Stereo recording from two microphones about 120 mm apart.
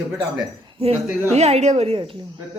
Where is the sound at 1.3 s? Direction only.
65° right (ahead or behind).